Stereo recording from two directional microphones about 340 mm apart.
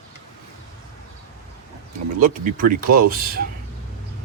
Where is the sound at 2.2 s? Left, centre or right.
Right.